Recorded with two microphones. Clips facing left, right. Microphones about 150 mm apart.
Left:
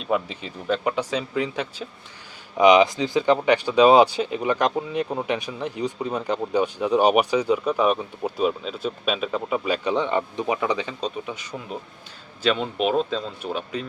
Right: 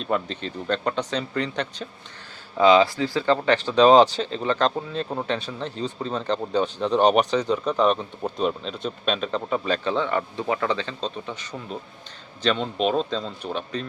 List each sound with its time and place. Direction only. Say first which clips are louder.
0.0 s speech: left 1 dB; 10° left (ahead or behind)
2.6 s speech: left 1 dB; 15° left (ahead or behind)